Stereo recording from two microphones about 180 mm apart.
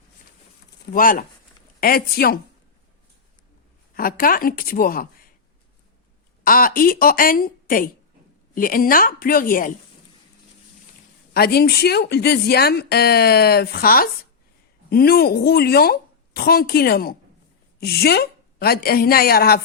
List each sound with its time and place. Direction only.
0.9 s a woman's voice: 50° left (ahead or behind)
3.9 s a woman's voice: 55° left (ahead or behind)
6.4 s a woman's voice: 50° left (ahead or behind)
11.3 s a woman's voice: 60° left (ahead or behind)